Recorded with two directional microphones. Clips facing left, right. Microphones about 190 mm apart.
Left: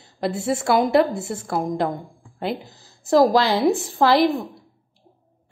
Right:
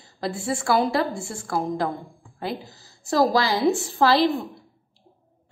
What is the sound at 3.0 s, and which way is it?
A woman's voice, 20° left (ahead or behind).